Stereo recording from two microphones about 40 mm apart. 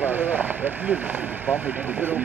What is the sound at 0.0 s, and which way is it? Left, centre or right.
Speech, right.